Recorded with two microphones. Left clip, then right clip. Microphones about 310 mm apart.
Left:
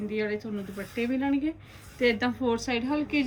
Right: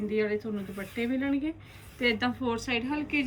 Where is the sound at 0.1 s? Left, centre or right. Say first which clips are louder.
Right 2 dB; centre.